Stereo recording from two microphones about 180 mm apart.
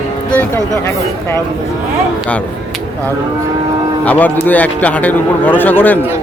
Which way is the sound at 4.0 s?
10° left (ahead or behind).